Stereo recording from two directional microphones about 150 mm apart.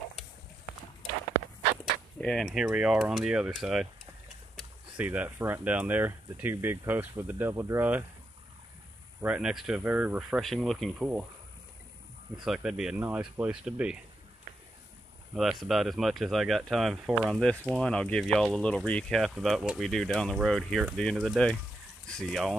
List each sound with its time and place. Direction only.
2.1 s speech: 5° left (ahead or behind); by 8.0 s 15° right (ahead or behind)
9.2 s speech: 5° right (ahead or behind)
12.4 s speech: 5° right (ahead or behind)
15.3 s speech: centre (ahead or behind)
17.7 s speech: 5° left (ahead or behind)